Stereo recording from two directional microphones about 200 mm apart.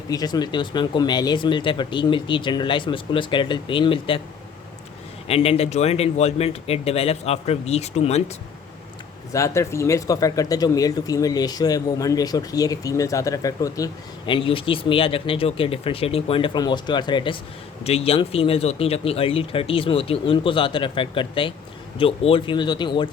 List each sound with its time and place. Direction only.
0.1 s speech: 20° left (ahead or behind)
5.3 s speech: 30° left (ahead or behind)
9.3 s speech: 15° left (ahead or behind)